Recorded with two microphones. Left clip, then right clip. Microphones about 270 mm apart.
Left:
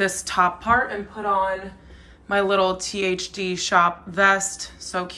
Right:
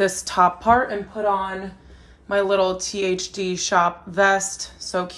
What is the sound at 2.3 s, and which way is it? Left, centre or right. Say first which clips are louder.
Speech: even; centre.